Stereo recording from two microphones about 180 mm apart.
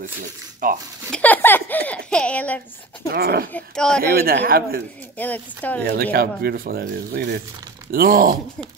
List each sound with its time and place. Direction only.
0.6 s speech: 50° right (ahead or behind)
1.1 s speech: 10° left (ahead or behind)
3.1 s speech: 55° right (ahead or behind)
3.5 s speech: 5° left (ahead or behind)
4.2 s speech: 55° right (ahead or behind)
5.1 s speech: 10° left (ahead or behind)
6.1 s speech: 55° right (ahead or behind)